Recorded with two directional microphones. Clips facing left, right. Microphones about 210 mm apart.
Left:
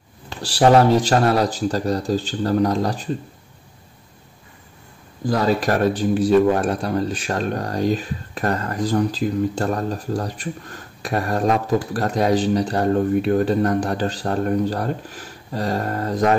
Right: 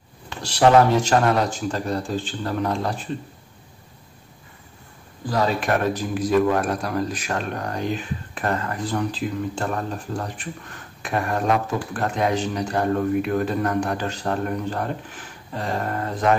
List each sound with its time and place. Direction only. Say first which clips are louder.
0.3 s speech: left 1 dB; 30° left (ahead or behind)
5.3 s speech: left 3 dB; 40° left (ahead or behind)